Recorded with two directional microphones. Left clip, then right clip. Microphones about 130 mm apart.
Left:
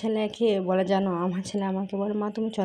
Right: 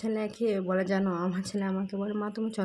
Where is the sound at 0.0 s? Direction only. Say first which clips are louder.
Left 5 dB; 20° left (ahead or behind).